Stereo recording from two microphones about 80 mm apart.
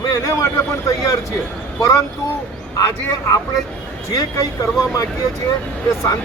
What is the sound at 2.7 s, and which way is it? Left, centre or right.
Speech, left.